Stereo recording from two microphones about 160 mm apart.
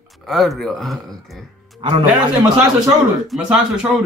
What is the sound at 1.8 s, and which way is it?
Speech, 30° right (ahead or behind).